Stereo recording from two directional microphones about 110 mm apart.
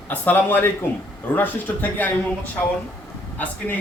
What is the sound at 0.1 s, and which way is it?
A man's voice, 15° left (ahead or behind).